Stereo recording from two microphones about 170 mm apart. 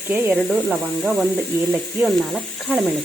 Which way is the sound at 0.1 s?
5° right (ahead or behind).